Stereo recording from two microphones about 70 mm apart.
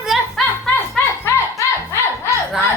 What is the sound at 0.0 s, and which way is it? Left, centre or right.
Music, centre.